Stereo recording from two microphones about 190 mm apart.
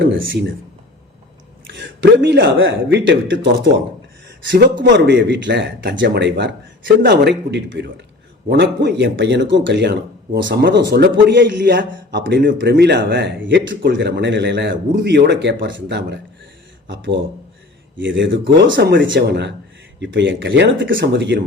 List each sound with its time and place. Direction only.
0.0 s speech: 75° right (ahead or behind)
1.6 s speech: 75° right (ahead or behind)
4.8 s speech: 65° right (ahead or behind)
18.7 s speech: 65° right (ahead or behind)
20.8 s speech: 55° right (ahead or behind)